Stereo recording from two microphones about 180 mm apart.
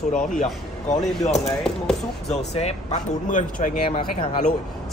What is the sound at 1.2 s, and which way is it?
Speech, 40° left (ahead or behind).